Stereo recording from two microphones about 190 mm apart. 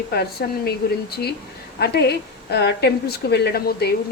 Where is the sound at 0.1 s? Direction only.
55° left (ahead or behind).